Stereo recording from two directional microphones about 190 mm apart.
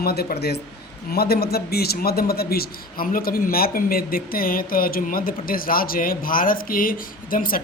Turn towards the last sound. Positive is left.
turn(degrees=50)  # may be behind; listen again after turning